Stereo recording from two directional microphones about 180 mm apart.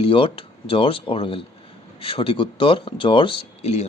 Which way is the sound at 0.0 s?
30° left (ahead or behind).